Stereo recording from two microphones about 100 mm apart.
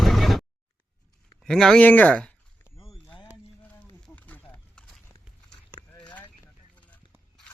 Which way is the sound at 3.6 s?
15° left (ahead or behind).